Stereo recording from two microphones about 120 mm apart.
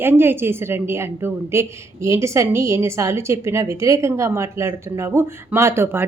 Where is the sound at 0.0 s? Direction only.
20° right (ahead or behind).